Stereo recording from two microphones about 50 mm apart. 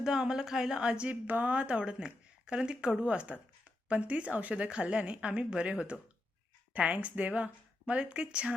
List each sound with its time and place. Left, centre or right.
0.0 s speech: centre
1.3 s speech: right
1.5 s speech: right